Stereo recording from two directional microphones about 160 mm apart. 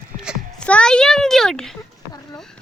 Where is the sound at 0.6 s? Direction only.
5° left (ahead or behind).